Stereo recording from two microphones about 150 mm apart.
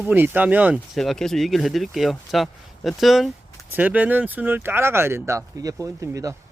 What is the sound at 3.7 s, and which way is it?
Speech, 10° right (ahead or behind).